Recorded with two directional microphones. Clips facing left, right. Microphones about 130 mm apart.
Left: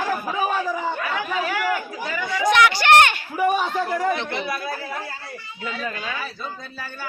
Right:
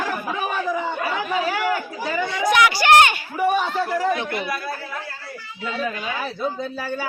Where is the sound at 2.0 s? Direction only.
25° right (ahead or behind).